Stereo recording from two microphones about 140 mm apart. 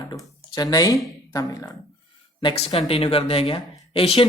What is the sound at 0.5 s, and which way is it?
Speech, 30° left (ahead or behind).